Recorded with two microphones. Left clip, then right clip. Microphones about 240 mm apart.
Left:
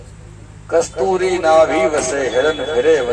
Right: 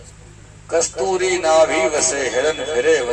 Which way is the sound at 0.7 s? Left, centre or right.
Right.